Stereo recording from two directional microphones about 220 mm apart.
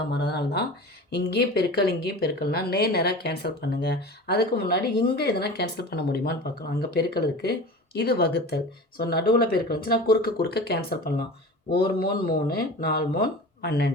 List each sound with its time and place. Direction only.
0.1 s speech: 50° left (ahead or behind)